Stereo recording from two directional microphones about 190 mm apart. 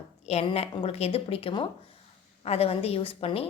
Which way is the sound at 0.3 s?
35° left (ahead or behind).